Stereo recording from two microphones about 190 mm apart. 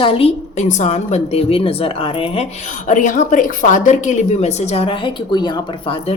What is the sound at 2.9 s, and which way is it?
A woman's voice, 40° left (ahead or behind).